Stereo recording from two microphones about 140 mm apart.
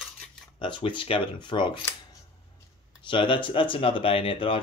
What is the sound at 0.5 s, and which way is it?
Speech, 35° left (ahead or behind).